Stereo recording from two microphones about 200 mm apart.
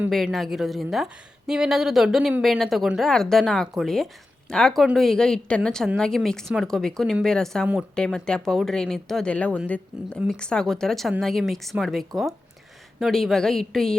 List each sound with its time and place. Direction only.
0.0 s a woman's voice: centre (ahead or behind)